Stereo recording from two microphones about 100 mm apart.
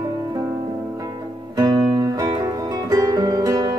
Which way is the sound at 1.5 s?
40° right (ahead or behind).